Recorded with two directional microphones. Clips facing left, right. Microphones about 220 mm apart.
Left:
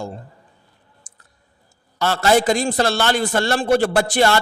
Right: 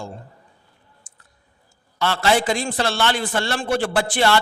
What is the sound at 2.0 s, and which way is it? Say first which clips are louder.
A man's voice: left 3 dB; 40° left (ahead or behind).